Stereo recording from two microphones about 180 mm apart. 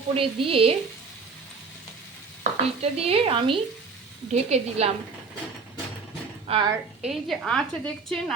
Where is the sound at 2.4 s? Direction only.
35° right (ahead or behind).